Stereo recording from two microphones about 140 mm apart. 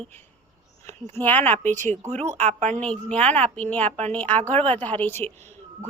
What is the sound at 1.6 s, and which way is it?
Speech, 60° right (ahead or behind).